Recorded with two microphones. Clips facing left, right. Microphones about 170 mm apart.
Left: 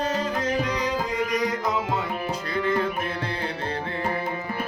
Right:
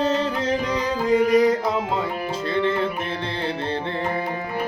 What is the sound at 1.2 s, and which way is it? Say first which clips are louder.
Music: right 8 dB; 30° right (ahead or behind).